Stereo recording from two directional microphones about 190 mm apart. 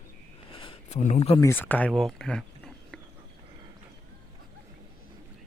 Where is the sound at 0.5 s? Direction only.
25° left (ahead or behind).